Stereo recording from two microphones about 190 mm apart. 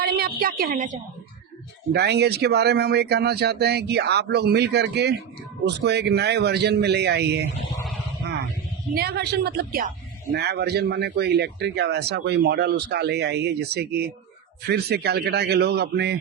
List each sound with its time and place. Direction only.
0.0 s a woman's voice: 55° right (ahead or behind)
1.9 s speech: 60° right (ahead or behind)
9.0 s speech: 55° right (ahead or behind)